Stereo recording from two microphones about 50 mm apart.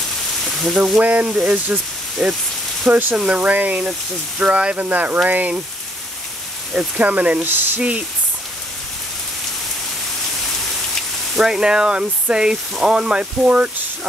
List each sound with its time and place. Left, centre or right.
0.5 s frying: centre
0.9 s speech: right
2.2 s speech: centre
2.9 s speech: right
3.3 s speech: right
6.7 s speech: right
7.4 s speech: right
11.3 s speech: centre